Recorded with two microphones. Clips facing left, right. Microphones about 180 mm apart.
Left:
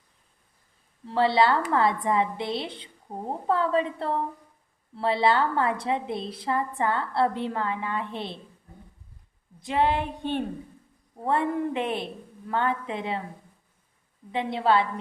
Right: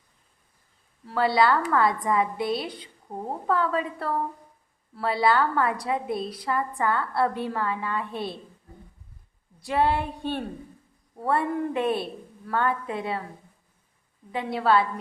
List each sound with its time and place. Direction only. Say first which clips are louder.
1.0 s a woman's voice: even; 25° left (ahead or behind)
9.6 s a woman's voice: right 1 dB; 20° left (ahead or behind)
14.3 s a woman's voice: even; 25° left (ahead or behind)